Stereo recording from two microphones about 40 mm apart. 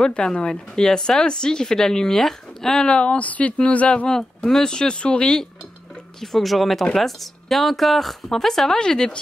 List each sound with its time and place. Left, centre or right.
0.0 s speech: left
2.9 s speech: left
3.3 s speech: left
4.1 s speech: centre
6.2 s speech: centre